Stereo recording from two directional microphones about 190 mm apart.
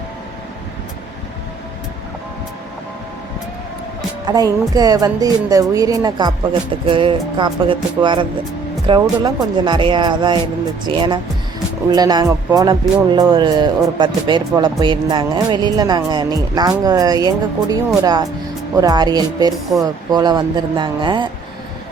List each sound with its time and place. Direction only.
4.3 s speech: 20° right (ahead or behind)